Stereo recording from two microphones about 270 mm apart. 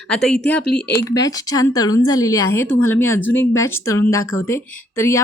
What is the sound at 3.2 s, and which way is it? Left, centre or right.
Speech, left.